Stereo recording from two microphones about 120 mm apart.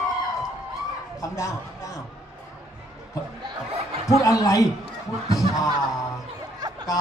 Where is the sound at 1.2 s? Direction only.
30° left (ahead or behind).